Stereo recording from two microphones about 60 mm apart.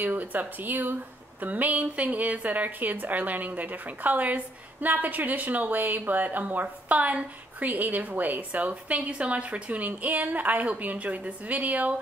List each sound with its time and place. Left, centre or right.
0.0 s a woman's voice: right